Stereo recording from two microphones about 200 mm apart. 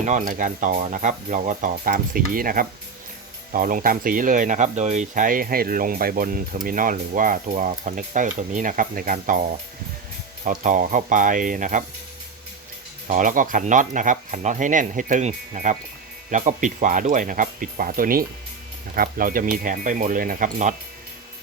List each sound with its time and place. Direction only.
0.0 s speech: 40° right (ahead or behind)
10.4 s speech: 40° right (ahead or behind)
13.1 s speech: 40° right (ahead or behind)